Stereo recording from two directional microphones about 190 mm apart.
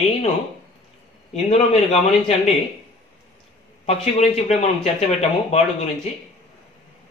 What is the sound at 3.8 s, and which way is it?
A man's voice, 35° left (ahead or behind).